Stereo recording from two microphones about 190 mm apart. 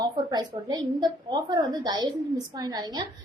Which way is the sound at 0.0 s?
20° right (ahead or behind).